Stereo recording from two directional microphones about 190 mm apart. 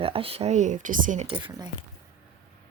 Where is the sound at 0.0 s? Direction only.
30° right (ahead or behind).